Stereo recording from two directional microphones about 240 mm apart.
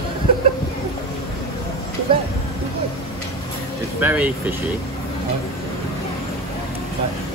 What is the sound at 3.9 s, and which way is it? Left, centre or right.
Speech, centre.